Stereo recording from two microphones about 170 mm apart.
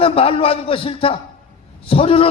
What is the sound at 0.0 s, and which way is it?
A man's voice, 35° left (ahead or behind).